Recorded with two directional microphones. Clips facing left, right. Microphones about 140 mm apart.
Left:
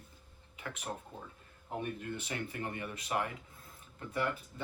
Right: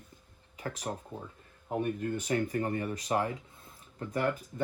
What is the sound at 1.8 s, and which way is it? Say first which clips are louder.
Speech: right 7 dB; 40° right (ahead or behind).